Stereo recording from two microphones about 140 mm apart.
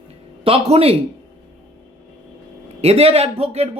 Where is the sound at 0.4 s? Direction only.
45° right (ahead or behind).